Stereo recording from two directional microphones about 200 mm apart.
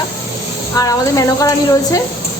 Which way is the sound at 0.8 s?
15° left (ahead or behind).